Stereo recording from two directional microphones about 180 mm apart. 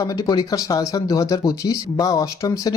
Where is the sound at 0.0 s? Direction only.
20° left (ahead or behind).